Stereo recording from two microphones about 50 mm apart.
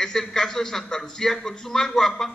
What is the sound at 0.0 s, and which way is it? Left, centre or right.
A man's voice, centre.